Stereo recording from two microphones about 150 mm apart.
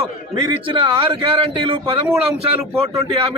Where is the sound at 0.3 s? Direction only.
35° right (ahead or behind).